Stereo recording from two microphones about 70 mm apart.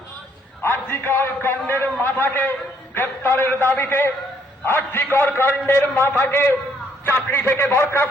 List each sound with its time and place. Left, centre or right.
0.6 s a man's voice: left